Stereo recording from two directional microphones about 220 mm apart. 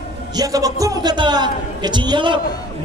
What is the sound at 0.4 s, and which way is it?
A man's voice, 15° right (ahead or behind).